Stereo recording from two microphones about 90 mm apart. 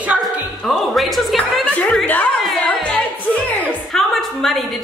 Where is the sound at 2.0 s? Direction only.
20° left (ahead or behind).